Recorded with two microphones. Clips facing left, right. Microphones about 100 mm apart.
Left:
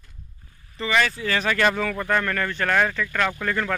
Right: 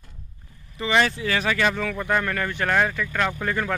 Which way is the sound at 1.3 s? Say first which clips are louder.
Left 1 dB; 10° right (ahead or behind).